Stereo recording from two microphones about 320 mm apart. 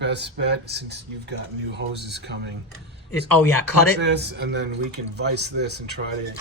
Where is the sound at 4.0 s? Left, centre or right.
Right.